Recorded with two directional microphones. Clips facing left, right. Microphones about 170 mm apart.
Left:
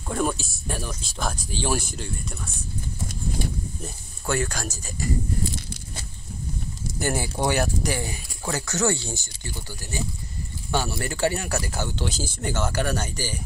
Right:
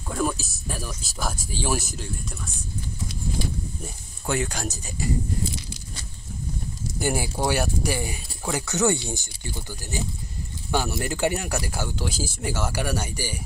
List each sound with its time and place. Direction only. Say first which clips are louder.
0.1 s speech: left 1 dB; centre (ahead or behind)
3.8 s speech: left 1 dB; 15° right (ahead or behind)
7.0 s speech: even; 10° right (ahead or behind)